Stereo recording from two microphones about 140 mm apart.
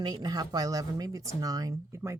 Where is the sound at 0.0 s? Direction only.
30° right (ahead or behind).